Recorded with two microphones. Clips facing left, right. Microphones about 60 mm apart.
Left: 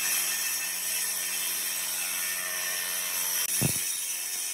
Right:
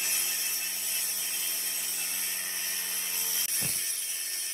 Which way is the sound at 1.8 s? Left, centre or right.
Left.